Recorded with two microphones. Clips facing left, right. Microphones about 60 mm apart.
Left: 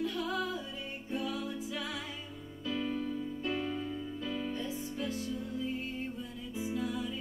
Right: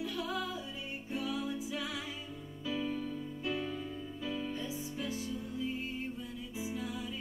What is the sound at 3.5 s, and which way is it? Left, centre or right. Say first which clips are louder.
Music: left 3 dB; left.